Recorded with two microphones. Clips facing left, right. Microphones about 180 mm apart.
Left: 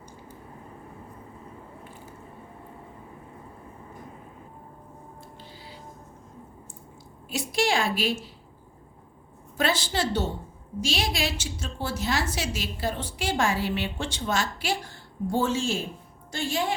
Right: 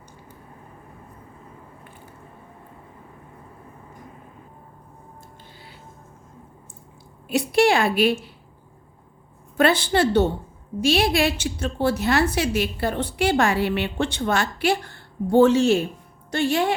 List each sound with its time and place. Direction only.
7.3 s a woman's voice: 60° right (ahead or behind)
9.6 s a woman's voice: 60° right (ahead or behind)